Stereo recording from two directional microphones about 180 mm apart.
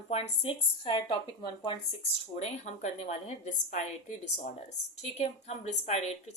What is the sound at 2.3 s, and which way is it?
Speech, 40° left (ahead or behind).